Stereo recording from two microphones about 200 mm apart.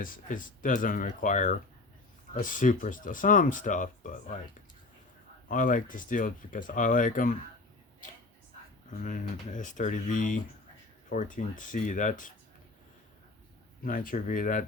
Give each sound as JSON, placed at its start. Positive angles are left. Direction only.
{"t": 0.0, "sound": "speech", "side_deg": 45}
{"t": 5.5, "sound": "speech", "side_deg": 40}
{"t": 8.9, "sound": "speech", "side_deg": 40}
{"t": 13.8, "sound": "speech", "side_deg": 45}